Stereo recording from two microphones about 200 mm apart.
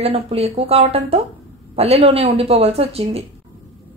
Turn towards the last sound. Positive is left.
turn(degrees=-30)  # may be behind; listen again after turning